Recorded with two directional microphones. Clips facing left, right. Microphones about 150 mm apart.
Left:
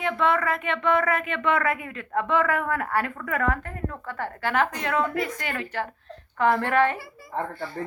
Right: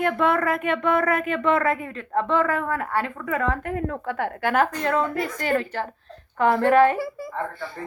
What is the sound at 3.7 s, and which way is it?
Speech, 65° right (ahead or behind).